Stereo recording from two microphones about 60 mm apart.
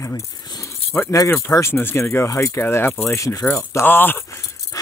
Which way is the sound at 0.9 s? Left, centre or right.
Left.